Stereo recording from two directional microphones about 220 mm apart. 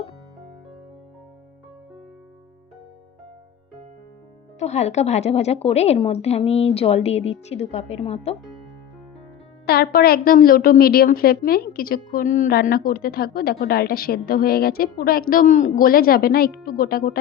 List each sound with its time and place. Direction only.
4.6 s a woman's voice: 30° left (ahead or behind)
9.6 s a woman's voice: 45° left (ahead or behind)